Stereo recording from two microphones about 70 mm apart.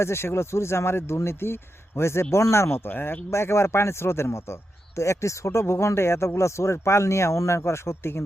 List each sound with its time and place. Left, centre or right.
0.0 s speech: left